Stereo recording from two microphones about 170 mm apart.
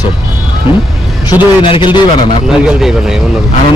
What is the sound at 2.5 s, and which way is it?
Speech, 5° right (ahead or behind).